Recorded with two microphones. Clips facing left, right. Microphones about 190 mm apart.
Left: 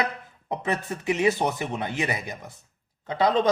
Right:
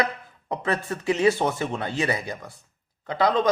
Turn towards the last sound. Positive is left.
turn(degrees=20)  # may be behind; listen again after turning